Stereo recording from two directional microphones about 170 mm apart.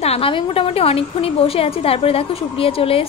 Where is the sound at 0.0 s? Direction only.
35° left (ahead or behind).